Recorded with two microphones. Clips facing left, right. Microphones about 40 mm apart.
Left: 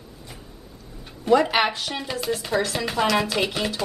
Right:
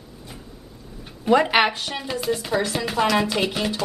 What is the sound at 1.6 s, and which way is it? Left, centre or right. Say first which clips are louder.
Chopping: right 2 dB; centre.